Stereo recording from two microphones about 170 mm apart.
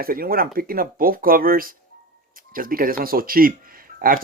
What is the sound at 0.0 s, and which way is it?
Speech, 60° right (ahead or behind).